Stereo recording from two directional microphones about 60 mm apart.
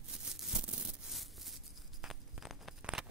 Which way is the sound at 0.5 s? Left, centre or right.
Centre.